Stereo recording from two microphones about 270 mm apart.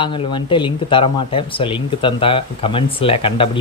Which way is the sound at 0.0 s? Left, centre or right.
Centre.